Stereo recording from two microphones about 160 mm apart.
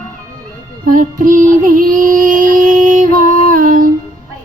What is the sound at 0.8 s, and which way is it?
Female singing, 55° right (ahead or behind).